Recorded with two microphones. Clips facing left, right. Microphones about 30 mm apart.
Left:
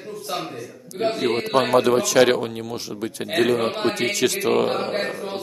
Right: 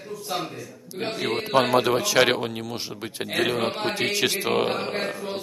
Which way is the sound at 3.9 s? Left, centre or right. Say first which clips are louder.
Left 2 dB; right.